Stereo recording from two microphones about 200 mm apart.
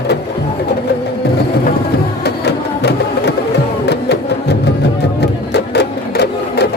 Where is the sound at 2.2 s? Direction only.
55° left (ahead or behind).